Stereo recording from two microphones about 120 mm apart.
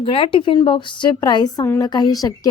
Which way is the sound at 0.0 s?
50° left (ahead or behind).